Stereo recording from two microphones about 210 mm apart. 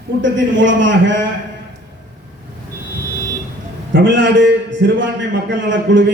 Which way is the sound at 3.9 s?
60° right (ahead or behind).